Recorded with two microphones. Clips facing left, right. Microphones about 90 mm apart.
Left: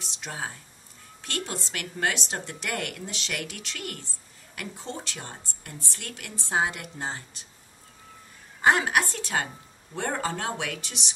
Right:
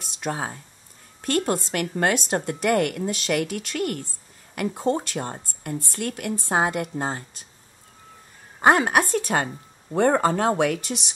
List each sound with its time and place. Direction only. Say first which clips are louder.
0.0 s speech: right 7 dB; 50° right (ahead or behind)
8.5 s speech: right 4 dB; 45° right (ahead or behind)